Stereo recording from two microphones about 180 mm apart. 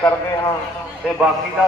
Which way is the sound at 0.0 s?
15° left (ahead or behind).